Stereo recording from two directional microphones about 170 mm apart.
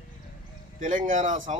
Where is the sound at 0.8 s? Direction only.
45° right (ahead or behind).